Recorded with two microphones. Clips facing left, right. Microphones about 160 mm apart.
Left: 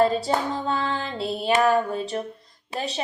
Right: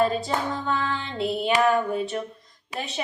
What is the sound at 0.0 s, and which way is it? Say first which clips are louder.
Female singing: left 2 dB; 35° left (ahead or behind).